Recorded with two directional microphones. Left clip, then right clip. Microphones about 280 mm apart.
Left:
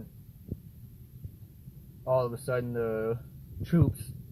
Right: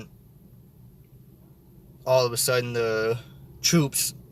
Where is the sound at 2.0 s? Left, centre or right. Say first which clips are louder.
Right 7 dB; centre.